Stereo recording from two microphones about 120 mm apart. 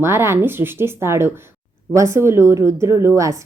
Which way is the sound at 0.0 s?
20° right (ahead or behind).